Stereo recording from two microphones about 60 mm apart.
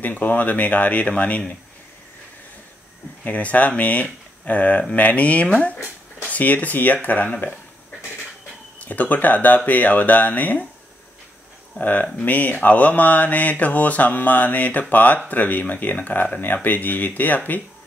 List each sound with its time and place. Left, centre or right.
0.0 s mantra: left
3.3 s mantra: left
8.8 s mantra: left
11.8 s speech: left
12.3 s mantra: left